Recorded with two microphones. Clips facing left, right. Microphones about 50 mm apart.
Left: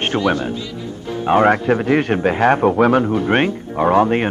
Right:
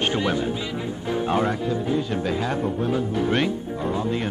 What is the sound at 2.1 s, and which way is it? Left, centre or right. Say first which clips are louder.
Speech: left 10 dB; left.